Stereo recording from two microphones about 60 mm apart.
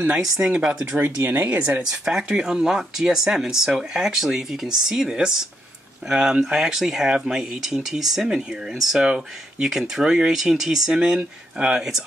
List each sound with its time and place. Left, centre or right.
0.1 s speech: centre
0.9 s speech: right
1.8 s speech: centre